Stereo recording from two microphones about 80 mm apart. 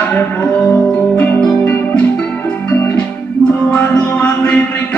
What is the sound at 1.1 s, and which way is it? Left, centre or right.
Music, centre.